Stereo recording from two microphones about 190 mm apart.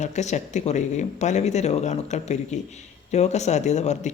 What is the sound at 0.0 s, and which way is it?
Speech, 40° left (ahead or behind).